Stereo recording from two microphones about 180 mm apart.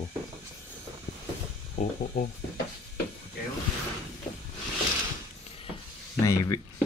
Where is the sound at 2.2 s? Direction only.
55° left (ahead or behind).